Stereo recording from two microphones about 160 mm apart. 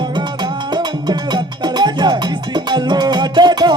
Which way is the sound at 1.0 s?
25° right (ahead or behind).